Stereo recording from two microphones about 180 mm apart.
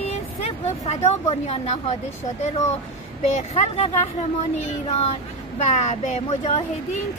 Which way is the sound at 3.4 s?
35° left (ahead or behind).